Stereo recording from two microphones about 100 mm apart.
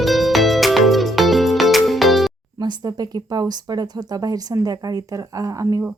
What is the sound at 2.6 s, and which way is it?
Speech, 40° right (ahead or behind).